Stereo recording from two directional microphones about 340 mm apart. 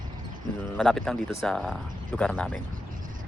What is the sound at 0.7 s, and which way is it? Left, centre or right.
Speech, centre.